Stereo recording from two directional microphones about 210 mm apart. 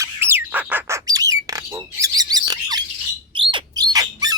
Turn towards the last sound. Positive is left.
turn(degrees=-15)  # may be behind; listen again after turning